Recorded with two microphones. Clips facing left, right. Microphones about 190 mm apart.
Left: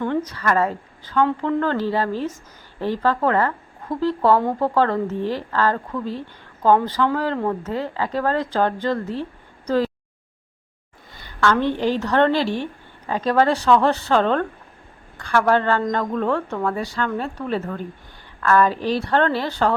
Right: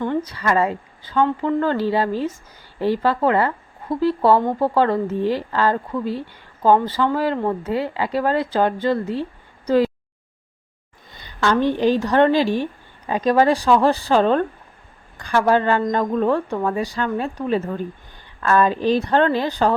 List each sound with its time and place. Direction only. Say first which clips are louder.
0.0 s speech: even; 10° right (ahead or behind)
9.6 s a sound: right 3 dB; 15° right (ahead or behind)
11.2 s speech: right 1 dB; 15° right (ahead or behind)